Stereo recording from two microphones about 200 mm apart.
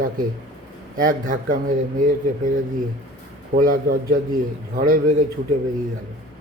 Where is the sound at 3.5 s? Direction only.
45° right (ahead or behind).